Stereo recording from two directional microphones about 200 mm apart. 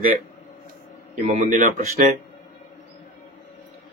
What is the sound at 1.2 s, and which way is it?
Speech, 40° right (ahead or behind).